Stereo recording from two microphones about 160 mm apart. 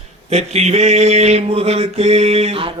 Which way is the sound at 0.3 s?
40° right (ahead or behind).